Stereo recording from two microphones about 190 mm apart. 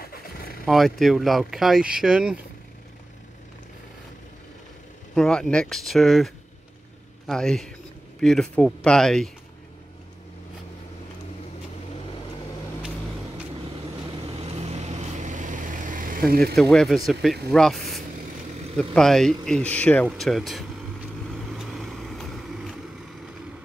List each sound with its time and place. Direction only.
0.0 s vehicle: 50° left (ahead or behind)
0.7 s speech: centre (ahead or behind)
5.1 s speech: 5° left (ahead or behind)
14.4 s vehicle: 35° right (ahead or behind); by 16.3 s 50° right (ahead or behind)
16.5 s speech: centre (ahead or behind)
21.5 s vehicle: centre (ahead or behind)